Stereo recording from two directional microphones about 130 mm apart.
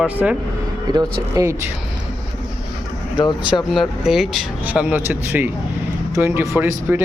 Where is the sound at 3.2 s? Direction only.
35° left (ahead or behind).